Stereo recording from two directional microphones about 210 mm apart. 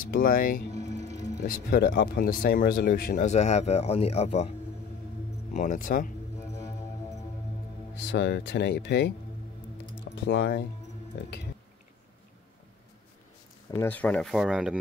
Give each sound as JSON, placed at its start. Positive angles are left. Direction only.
{"t": 0.0, "sound": "speech", "side_deg": 40}
{"t": 0.8, "sound": "music", "side_deg": -30}
{"t": 1.5, "sound": "speech", "side_deg": 45}
{"t": 3.3, "sound": "speech", "side_deg": 35}
{"t": 5.5, "sound": "speech", "side_deg": 40}
{"t": 6.5, "sound": "music", "side_deg": 15}
{"t": 7.9, "sound": "speech", "side_deg": 55}
{"t": 10.1, "sound": "speech", "side_deg": 55}
{"t": 13.7, "sound": "speech", "side_deg": 10}